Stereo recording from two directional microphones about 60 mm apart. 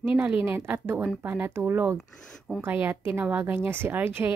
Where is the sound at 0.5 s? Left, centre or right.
Right.